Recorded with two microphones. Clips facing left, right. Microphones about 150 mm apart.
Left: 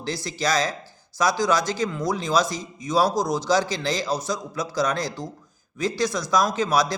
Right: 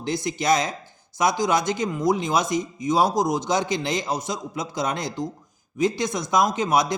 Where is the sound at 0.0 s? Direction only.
20° right (ahead or behind).